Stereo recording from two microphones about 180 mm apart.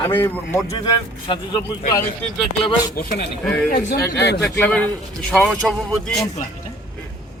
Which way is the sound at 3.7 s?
60° left (ahead or behind).